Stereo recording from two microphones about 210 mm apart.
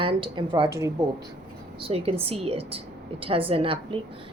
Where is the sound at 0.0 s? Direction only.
25° right (ahead or behind).